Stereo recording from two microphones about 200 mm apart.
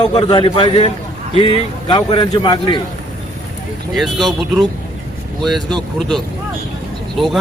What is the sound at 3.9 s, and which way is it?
Speech, centre (ahead or behind).